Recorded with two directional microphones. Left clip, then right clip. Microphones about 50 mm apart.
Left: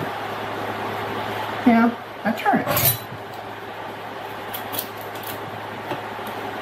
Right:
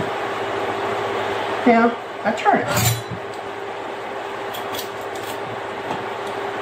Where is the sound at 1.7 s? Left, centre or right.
Centre.